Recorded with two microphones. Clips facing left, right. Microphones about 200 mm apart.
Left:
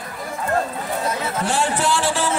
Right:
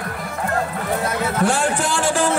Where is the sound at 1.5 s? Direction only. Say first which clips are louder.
Even; 50° right (ahead or behind).